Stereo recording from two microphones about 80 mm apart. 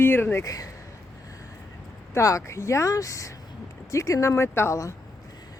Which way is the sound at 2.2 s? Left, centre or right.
Left.